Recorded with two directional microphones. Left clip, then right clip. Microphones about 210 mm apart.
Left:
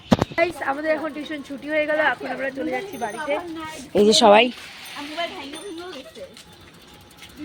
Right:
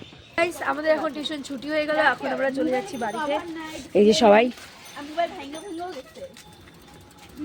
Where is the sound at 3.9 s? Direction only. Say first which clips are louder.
Left 2 dB; 10° right (ahead or behind).